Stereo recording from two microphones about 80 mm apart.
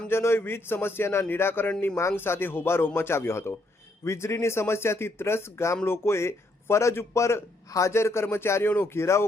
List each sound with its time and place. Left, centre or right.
0.1 s a man's voice: left